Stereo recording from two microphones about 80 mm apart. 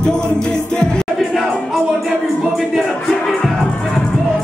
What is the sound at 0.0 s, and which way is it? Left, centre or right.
Music, centre.